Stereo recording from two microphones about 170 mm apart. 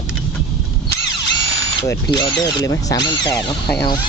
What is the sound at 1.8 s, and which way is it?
Speech, 15° left (ahead or behind).